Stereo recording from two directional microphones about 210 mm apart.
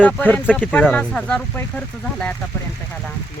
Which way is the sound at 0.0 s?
5° left (ahead or behind).